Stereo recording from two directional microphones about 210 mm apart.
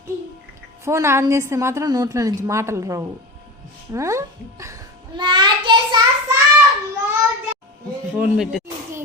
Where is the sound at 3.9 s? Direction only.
15° right (ahead or behind).